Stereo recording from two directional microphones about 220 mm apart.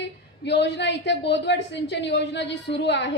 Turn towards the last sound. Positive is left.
turn(degrees=55)  # may be behind; listen again after turning